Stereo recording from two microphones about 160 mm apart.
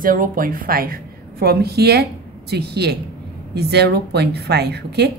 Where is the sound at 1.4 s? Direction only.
80° right.